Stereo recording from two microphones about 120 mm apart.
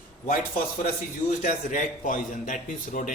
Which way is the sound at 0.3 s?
90° left.